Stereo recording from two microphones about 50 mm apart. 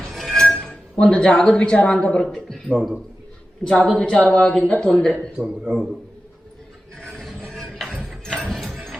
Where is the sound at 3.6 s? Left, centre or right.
Centre.